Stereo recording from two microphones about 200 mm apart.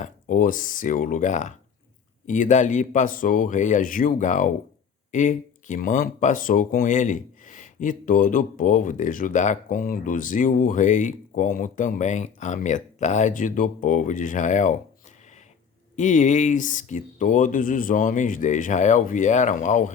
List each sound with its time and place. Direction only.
0.0 s speech: 40° left (ahead or behind)
16.0 s speech: 40° left (ahead or behind)